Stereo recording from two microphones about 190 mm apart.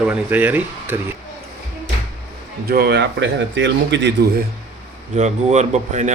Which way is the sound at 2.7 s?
60° right (ahead or behind).